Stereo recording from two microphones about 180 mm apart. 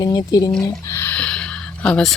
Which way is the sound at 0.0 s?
25° left (ahead or behind).